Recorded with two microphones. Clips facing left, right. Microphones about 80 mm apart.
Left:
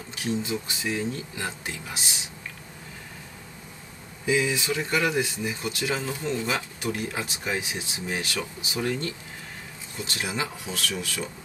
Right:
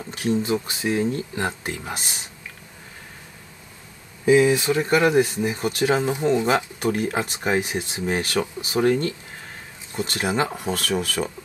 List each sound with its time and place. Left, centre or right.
0.1 s speech: right
4.3 s speech: right